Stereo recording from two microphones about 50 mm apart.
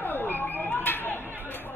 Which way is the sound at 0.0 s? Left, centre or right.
Left.